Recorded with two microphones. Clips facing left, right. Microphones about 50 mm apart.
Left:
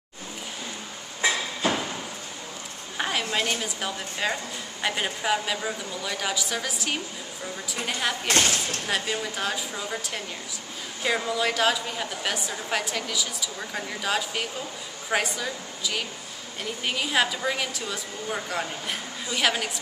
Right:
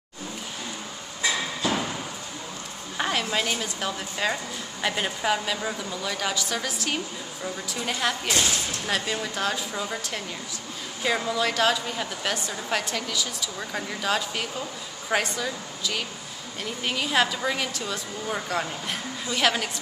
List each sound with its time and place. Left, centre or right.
1.6 s a sound: left
3.0 s a sound: centre
3.6 s a woman's voice: centre
8.3 s speech: left
8.8 s a woman's voice: centre
11.0 s a woman's voice: centre